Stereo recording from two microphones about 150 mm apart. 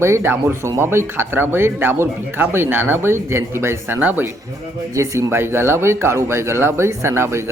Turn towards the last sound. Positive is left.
turn(degrees=-15)  # may be behind; listen again after turning